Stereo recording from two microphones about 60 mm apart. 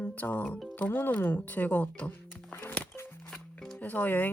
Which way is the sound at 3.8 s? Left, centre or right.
Left.